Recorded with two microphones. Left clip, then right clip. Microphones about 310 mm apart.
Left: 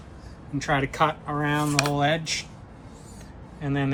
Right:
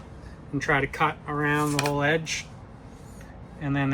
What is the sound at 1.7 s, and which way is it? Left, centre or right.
Speech, left.